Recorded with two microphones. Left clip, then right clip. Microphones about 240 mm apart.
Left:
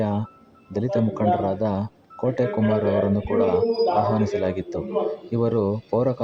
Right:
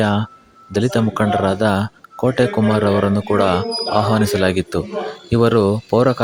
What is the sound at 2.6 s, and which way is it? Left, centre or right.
Speech, right.